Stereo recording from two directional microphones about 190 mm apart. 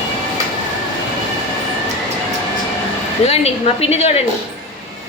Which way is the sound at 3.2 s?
35° left (ahead or behind).